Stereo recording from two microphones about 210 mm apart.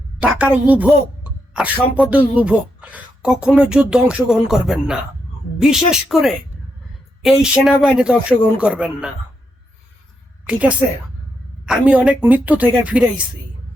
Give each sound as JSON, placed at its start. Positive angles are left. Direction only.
{"t": 0.2, "sound": "speech", "side_deg": -5}
{"t": 10.4, "sound": "a woman's voice", "side_deg": -5}